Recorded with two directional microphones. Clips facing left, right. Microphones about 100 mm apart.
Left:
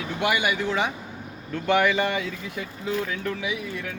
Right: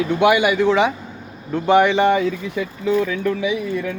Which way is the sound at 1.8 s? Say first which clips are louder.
Right 6 dB; 30° right (ahead or behind).